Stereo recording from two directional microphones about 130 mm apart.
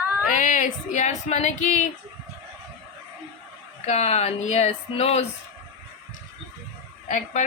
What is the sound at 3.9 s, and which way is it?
Speech, 55° left (ahead or behind).